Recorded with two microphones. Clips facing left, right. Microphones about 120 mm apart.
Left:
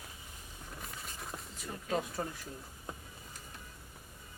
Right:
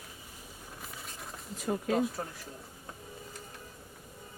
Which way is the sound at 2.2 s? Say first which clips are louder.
Left 1 dB; centre (ahead or behind).